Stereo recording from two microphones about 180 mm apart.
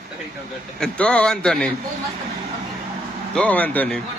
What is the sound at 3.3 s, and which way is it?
Speech, 5° left (ahead or behind).